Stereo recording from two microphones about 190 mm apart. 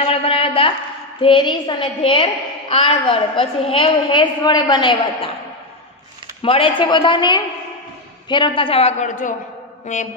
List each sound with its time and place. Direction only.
0.0 s a sound: 30° left (ahead or behind)
1.2 s a woman's voice: 25° left (ahead or behind)
6.4 s a woman's voice: 30° left (ahead or behind)